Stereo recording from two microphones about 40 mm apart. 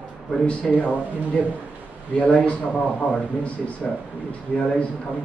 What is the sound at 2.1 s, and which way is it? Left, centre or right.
Speech, left.